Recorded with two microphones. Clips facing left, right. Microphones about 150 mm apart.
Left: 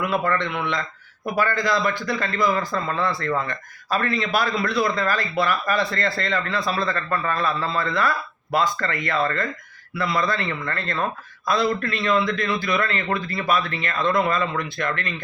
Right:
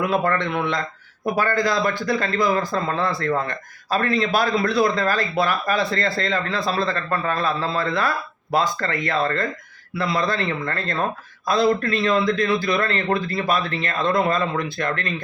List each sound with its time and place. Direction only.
0.0 s a man's voice: 45° right (ahead or behind)